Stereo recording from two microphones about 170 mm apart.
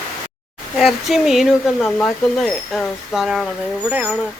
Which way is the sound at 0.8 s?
Centre (ahead or behind).